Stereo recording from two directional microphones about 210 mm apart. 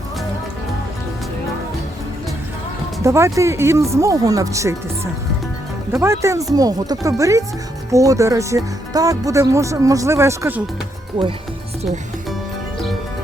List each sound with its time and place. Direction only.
3.0 s speech: 15° right (ahead or behind)
5.9 s speech: 10° right (ahead or behind)